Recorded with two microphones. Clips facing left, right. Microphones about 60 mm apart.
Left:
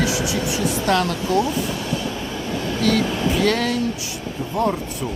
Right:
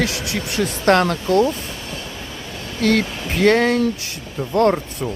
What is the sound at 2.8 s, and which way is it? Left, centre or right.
Speech, right.